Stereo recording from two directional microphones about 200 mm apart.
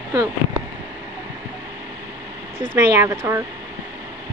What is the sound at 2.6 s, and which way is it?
Speech, 10° right (ahead or behind).